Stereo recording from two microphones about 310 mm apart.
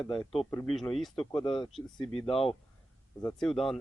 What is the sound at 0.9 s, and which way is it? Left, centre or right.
Speech, centre.